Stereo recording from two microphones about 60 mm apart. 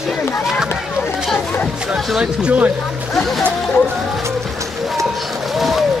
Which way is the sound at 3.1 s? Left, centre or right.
Centre.